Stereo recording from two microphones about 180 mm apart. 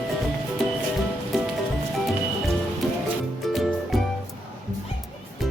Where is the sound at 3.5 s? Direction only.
Centre (ahead or behind).